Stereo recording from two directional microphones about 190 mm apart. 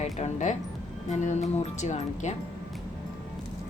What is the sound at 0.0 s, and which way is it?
A woman's voice, 40° left (ahead or behind).